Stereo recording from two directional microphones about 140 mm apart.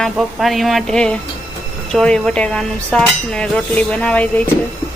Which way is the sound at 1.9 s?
5° left (ahead or behind).